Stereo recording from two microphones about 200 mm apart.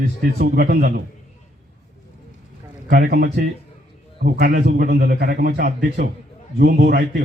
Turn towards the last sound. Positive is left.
turn(degrees=-55)  # may be behind; listen again after turning